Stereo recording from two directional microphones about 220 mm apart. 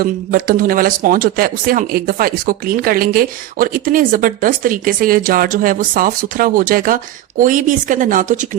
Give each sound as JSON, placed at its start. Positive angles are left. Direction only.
{"t": 0.0, "sound": "speech", "side_deg": -40}